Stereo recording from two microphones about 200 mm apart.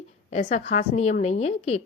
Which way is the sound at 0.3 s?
35° left (ahead or behind).